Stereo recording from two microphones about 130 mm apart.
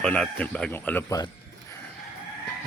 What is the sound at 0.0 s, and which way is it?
A man's voice, 5° left (ahead or behind).